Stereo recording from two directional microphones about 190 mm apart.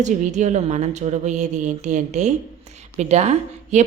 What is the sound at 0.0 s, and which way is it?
Speech, 40° right (ahead or behind).